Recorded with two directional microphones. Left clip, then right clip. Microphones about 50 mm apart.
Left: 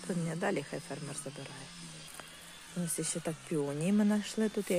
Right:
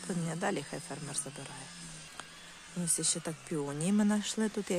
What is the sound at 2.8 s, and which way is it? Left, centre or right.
Speech, centre.